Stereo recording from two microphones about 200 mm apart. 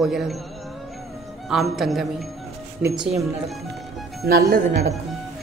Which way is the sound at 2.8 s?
25° right (ahead or behind).